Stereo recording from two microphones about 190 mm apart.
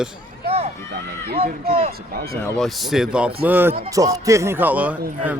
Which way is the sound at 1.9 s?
55° right (ahead or behind).